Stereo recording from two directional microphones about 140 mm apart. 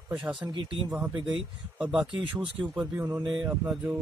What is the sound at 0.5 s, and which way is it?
Speech, 35° right (ahead or behind).